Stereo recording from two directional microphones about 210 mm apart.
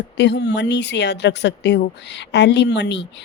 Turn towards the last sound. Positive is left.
turn(degrees=55)  # may be behind; listen again after turning